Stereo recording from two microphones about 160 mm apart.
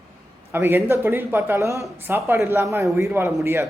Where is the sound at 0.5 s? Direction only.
15° right (ahead or behind).